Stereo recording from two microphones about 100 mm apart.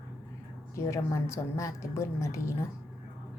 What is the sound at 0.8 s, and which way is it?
A woman's voice, 30° left (ahead or behind).